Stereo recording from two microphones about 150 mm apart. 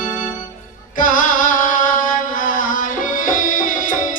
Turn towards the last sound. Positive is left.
turn(degrees=65)  # may be behind; listen again after turning